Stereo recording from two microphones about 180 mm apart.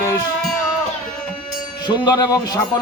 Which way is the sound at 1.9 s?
20° left (ahead or behind).